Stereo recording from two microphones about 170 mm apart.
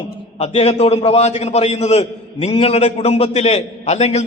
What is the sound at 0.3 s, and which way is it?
A man's voice, 35° left (ahead or behind).